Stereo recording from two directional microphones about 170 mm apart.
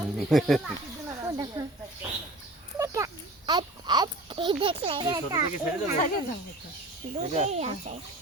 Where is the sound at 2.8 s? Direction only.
20° right (ahead or behind).